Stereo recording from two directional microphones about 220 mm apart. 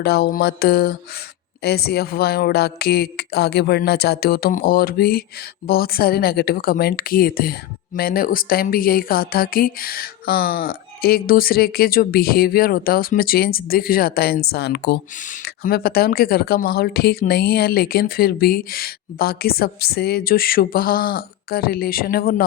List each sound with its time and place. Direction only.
0.0 s speech: 45° left (ahead or behind)
15.1 s speech: 35° left (ahead or behind)